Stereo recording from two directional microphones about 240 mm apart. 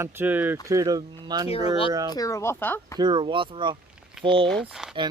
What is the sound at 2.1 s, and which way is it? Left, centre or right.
Speech, centre.